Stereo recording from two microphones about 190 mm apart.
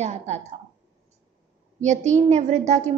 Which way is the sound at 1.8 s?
40° right (ahead or behind).